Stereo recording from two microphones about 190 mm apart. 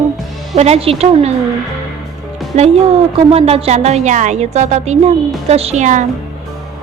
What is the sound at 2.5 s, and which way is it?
A woman's voice, 40° right (ahead or behind).